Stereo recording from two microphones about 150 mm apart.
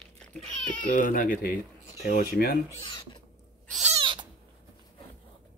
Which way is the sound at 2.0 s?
85° left.